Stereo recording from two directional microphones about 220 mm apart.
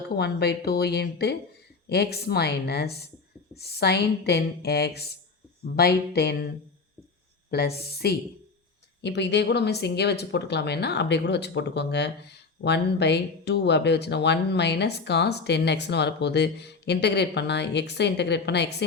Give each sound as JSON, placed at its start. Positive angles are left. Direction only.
{"t": 0.2, "sound": "speech", "side_deg": 50}
{"t": 7.5, "sound": "speech", "side_deg": 45}